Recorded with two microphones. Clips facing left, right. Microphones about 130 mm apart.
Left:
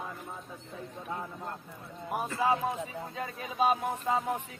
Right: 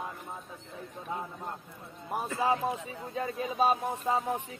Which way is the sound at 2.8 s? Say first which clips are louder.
Right 3 dB; 30° right (ahead or behind).